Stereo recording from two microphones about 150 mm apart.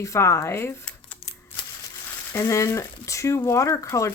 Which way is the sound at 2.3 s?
20° left (ahead or behind).